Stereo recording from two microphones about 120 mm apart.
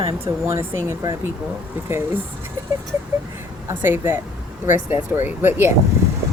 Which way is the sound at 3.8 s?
15° right (ahead or behind).